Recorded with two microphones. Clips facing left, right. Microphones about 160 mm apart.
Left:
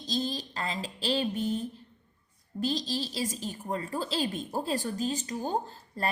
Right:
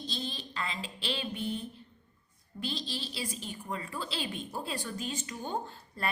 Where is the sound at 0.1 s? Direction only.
40° left (ahead or behind).